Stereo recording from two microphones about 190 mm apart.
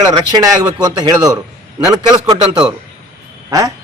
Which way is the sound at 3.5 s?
20° right (ahead or behind).